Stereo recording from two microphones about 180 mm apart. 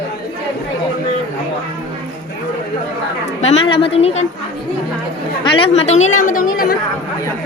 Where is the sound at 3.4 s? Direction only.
30° left (ahead or behind).